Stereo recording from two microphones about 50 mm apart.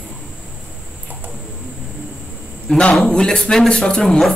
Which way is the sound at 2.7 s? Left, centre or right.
Centre.